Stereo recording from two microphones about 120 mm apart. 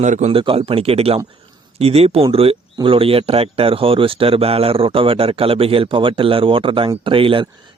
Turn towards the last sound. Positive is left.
turn(degrees=-45)  # may be behind; listen again after turning